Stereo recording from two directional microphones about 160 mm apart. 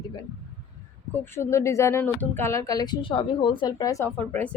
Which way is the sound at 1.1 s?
15° left (ahead or behind).